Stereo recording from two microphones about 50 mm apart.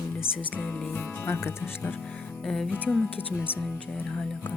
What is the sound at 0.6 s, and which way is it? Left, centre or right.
Music, left.